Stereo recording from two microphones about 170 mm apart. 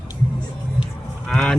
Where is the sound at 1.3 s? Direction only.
5° left (ahead or behind).